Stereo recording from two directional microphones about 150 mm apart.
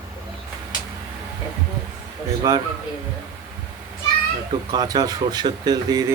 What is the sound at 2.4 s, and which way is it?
Speech, 25° right (ahead or behind).